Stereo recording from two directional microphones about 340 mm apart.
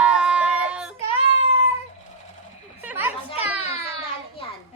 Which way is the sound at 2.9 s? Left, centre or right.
Centre.